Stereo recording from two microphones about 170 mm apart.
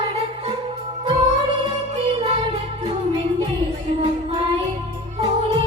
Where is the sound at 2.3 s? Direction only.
30° right (ahead or behind).